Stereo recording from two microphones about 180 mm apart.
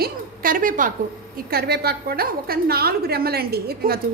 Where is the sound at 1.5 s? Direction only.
60° right (ahead or behind).